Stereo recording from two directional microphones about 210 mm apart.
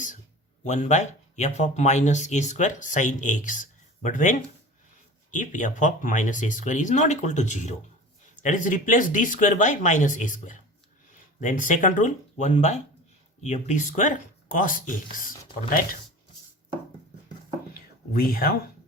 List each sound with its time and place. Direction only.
0.6 s speech: 35° left (ahead or behind)
18.1 s speech: 45° left (ahead or behind)